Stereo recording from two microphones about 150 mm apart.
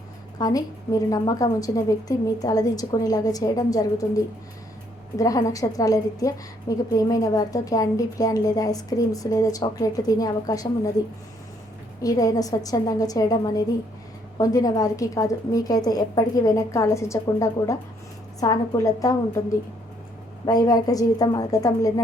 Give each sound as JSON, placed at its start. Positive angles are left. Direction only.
{"t": 0.3, "sound": "a woman's voice", "side_deg": 25}
{"t": 12.0, "sound": "a woman's voice", "side_deg": 25}
{"t": 20.4, "sound": "a woman's voice", "side_deg": 25}